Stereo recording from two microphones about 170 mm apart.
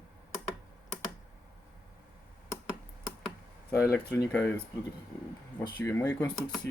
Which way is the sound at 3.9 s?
10° left (ahead or behind).